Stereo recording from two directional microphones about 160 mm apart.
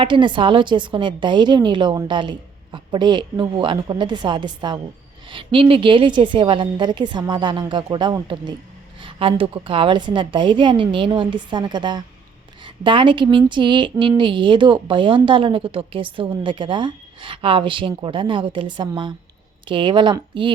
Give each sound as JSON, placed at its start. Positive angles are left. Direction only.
{"t": 0.0, "sound": "a woman's voice", "side_deg": -30}